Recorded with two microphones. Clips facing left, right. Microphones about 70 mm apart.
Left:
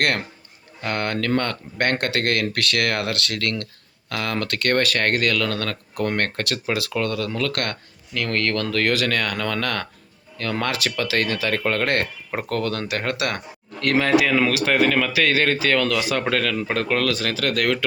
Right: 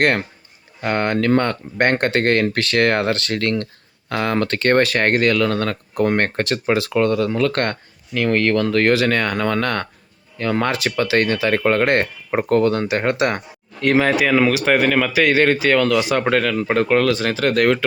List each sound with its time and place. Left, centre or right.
0.0 s speech: right
8.3 s speech: right